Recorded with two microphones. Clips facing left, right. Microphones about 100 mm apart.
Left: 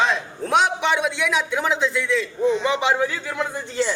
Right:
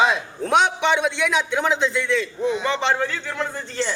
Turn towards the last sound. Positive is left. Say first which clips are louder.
# left 2 dB
turn(degrees=10)  # may be behind; listen again after turning